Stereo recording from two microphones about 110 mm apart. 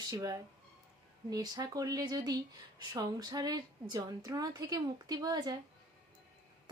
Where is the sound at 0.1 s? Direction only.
30° right (ahead or behind).